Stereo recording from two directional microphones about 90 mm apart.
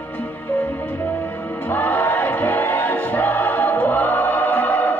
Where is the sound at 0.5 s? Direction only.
20° left (ahead or behind).